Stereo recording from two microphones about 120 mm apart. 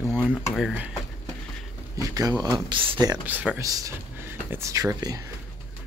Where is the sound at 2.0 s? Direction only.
30° right (ahead or behind).